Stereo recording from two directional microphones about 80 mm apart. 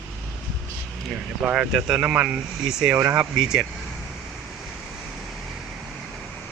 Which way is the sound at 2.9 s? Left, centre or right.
Right.